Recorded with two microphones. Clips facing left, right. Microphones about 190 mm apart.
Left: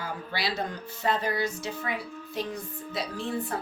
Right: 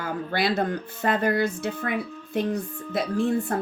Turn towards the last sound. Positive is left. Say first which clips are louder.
# right 8 dB
turn(degrees=-50)  # may be behind; listen again after turning